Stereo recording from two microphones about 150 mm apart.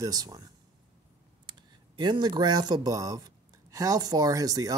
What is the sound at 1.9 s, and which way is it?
Speech, 30° right (ahead or behind).